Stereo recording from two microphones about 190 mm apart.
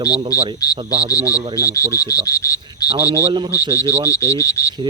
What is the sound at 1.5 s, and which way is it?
Speech, 15° left (ahead or behind).